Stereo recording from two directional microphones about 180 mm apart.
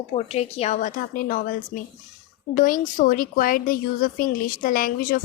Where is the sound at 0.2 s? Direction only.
35° left (ahead or behind).